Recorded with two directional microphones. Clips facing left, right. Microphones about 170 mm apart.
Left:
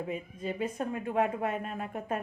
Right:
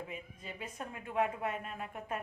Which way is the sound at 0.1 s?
40° left (ahead or behind).